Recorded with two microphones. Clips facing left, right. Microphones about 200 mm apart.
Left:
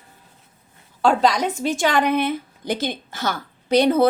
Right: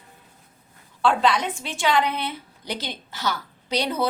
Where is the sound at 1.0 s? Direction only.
40° left (ahead or behind).